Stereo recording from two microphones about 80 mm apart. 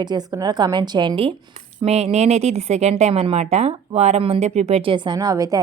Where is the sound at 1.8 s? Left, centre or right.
Right.